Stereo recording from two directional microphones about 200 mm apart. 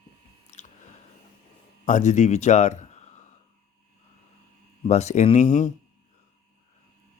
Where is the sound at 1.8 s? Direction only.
40° left (ahead or behind).